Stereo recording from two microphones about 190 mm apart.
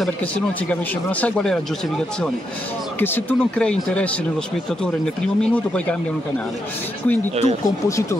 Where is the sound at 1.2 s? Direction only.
5° left (ahead or behind).